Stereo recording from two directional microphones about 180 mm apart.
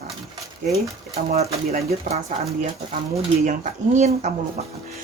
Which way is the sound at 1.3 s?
35° right (ahead or behind).